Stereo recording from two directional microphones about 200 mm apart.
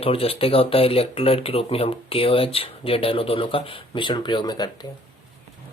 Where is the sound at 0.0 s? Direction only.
30° left (ahead or behind).